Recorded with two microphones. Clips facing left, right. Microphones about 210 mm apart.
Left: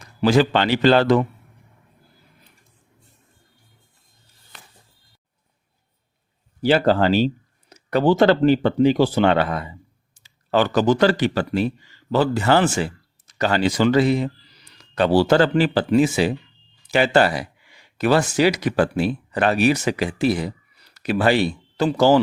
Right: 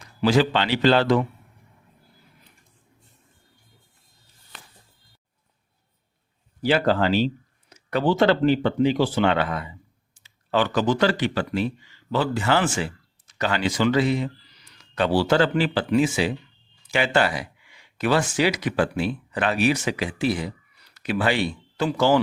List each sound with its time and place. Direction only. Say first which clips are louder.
0.2 s a man's voice: left 3 dB; 45° left (ahead or behind)
6.6 s speech: left 4 dB; 30° left (ahead or behind)